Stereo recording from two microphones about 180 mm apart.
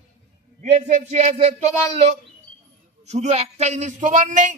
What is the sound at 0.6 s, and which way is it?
Speech, 40° right (ahead or behind).